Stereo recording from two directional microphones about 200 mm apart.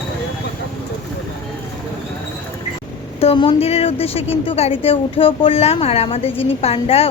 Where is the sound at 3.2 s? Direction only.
25° left (ahead or behind).